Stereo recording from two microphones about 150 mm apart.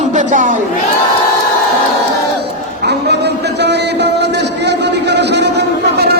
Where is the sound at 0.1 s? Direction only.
55° right (ahead or behind).